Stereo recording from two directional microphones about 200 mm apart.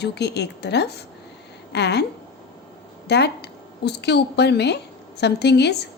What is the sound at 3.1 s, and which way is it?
A woman's voice, 60° left (ahead or behind).